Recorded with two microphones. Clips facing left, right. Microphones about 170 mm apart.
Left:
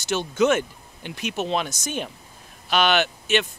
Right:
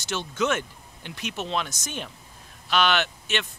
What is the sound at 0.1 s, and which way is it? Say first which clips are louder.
Speech: left 6 dB; 10° left (ahead or behind).